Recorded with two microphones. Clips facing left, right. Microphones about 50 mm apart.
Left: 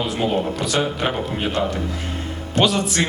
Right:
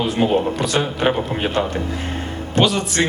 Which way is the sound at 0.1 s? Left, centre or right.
Right.